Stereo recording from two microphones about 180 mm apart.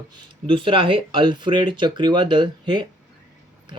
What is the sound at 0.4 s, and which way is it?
Speech, 30° right (ahead or behind).